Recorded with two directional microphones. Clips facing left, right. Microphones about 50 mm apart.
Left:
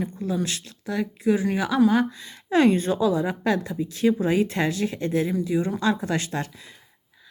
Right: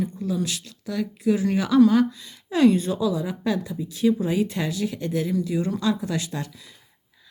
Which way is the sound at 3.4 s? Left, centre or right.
Left.